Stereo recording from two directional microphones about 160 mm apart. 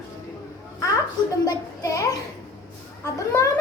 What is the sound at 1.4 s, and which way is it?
Speech, 20° left (ahead or behind).